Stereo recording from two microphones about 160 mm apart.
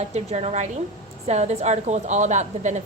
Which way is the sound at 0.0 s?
45° right (ahead or behind).